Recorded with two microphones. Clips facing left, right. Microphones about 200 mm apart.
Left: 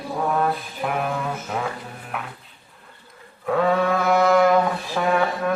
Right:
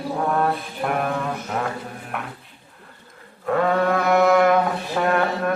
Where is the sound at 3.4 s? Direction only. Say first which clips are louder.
Even; centre (ahead or behind).